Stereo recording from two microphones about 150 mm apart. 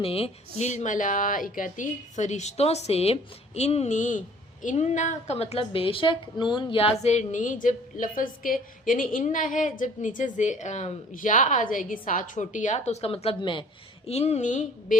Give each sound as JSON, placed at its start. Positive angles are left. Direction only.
{"t": 0.0, "sound": "a woman's voice", "side_deg": 40}
{"t": 7.0, "sound": "a woman's voice", "side_deg": 50}
{"t": 14.1, "sound": "a woman's voice", "side_deg": 45}